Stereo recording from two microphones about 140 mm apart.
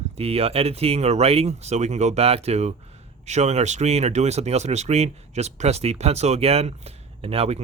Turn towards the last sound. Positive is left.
turn(degrees=-45)  # may be behind; listen again after turning